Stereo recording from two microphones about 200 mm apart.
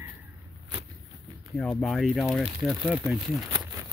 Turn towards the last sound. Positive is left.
turn(degrees=0)  # may be behind; listen again after turning